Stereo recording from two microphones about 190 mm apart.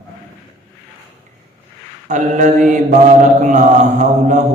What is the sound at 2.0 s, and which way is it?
A man's voice, 40° right (ahead or behind).